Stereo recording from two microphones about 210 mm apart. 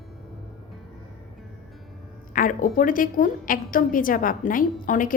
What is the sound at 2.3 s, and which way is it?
A woman's voice, 40° left (ahead or behind).